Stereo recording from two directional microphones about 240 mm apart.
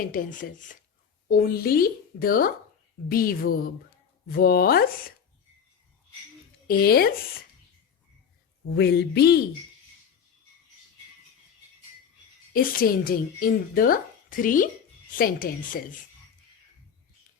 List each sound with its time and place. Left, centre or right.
0.1 s a woman's voice: left
6.7 s a woman's voice: left
8.7 s a sound: left
12.5 s a woman's voice: left